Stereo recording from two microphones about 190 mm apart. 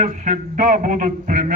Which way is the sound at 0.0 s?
45° right (ahead or behind).